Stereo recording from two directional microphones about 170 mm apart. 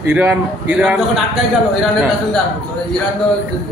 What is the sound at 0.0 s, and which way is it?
Speech, 10° right (ahead or behind).